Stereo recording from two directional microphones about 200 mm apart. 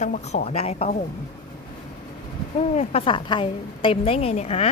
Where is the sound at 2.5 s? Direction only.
35° left (ahead or behind).